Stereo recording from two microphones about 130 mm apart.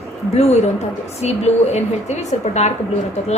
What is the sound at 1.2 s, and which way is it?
Speech, 60° left (ahead or behind).